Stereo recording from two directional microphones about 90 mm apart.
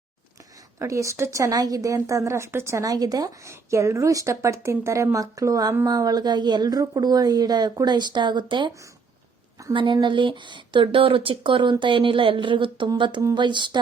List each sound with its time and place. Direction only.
0.8 s speech: 35° right (ahead or behind)
3.5 s a woman's voice: 35° right (ahead or behind); by 8.7 s 60° right (ahead or behind)
9.7 s speech: 65° right (ahead or behind)